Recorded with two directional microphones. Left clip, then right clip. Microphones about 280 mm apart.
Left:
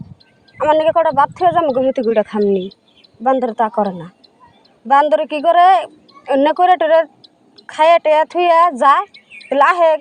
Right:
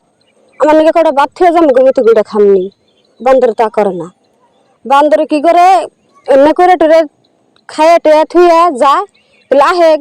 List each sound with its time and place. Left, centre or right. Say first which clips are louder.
0.6 s speech: right 6 dB; centre
5.1 s speech: right 5 dB; centre